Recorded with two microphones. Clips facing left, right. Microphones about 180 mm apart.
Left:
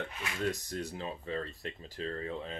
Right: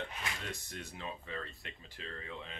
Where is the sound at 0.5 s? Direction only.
40° left (ahead or behind).